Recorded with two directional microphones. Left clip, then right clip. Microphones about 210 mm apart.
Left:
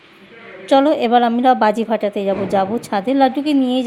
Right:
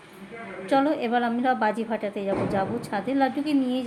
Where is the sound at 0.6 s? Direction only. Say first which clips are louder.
Left 10 dB; 40° left (ahead or behind).